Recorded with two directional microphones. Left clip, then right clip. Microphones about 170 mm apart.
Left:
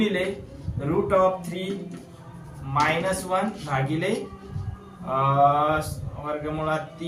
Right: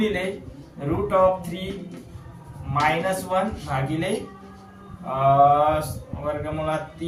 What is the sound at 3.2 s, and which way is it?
Speech, 15° right (ahead or behind).